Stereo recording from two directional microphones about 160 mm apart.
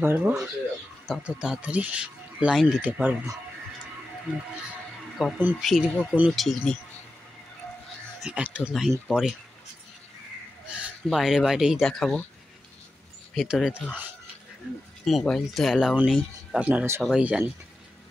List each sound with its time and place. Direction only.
0.0 s speech: 15° right (ahead or behind)
1.0 s speech: 5° right (ahead or behind)
5.2 s speech: centre (ahead or behind)
6.1 s speech: 10° right (ahead or behind)
6.4 s speech: 5° left (ahead or behind)
8.2 s speech: 5° right (ahead or behind)
10.7 s speech: 5° right (ahead or behind)
13.3 s speech: centre (ahead or behind)
15.0 s speech: centre (ahead or behind)